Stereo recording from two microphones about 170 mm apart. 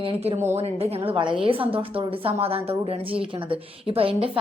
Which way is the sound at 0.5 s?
35° right (ahead or behind).